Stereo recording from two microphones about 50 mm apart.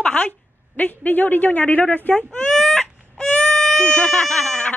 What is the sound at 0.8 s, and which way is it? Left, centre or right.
Speech, left.